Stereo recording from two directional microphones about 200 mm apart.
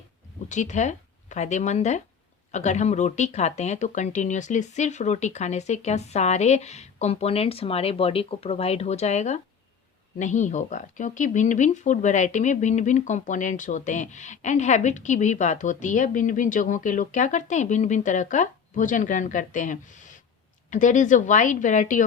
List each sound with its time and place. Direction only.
0.4 s speech: 35° left (ahead or behind)